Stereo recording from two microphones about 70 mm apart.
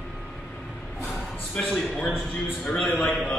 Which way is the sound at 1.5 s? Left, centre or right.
Centre.